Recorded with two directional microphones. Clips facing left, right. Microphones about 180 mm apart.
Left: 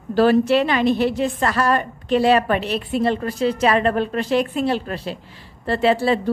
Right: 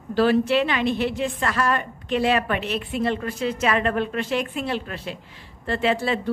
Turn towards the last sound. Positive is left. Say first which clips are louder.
# left 5 dB
turn(degrees=35)  # may be behind; listen again after turning